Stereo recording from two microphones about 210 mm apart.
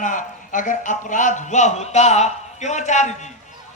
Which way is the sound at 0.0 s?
40° left (ahead or behind).